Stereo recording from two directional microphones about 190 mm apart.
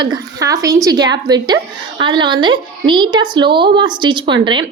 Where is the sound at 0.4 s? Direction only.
20° right (ahead or behind).